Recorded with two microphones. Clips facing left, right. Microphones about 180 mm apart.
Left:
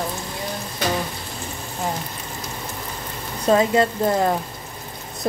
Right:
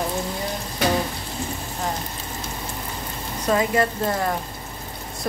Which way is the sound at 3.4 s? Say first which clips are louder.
Left 4 dB; 25° left (ahead or behind).